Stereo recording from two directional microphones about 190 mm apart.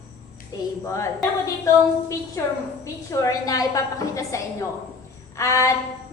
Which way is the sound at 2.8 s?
15° left (ahead or behind).